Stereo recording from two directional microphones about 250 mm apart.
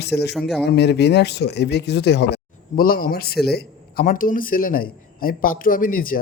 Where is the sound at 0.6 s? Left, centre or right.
Left.